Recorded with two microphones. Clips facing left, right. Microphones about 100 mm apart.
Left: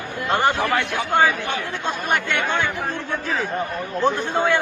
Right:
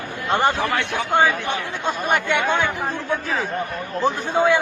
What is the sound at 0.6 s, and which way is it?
Speech, centre (ahead or behind).